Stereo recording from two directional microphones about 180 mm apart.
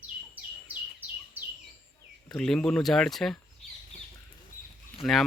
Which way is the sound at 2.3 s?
Centre (ahead or behind).